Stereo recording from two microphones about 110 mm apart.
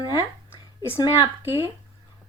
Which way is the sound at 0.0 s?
35° left (ahead or behind).